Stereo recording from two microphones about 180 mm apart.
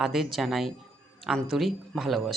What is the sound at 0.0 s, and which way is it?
A woman's voice, centre (ahead or behind).